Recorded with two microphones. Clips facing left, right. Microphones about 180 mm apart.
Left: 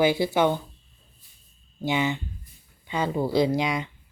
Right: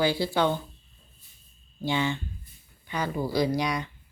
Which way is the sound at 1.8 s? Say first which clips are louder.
Left 2 dB; 15° left (ahead or behind).